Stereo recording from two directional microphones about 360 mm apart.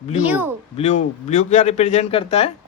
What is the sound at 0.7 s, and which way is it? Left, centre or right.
Speech, centre.